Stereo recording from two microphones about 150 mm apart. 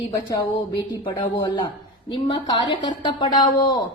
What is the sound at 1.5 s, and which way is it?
A woman's voice, 30° left (ahead or behind).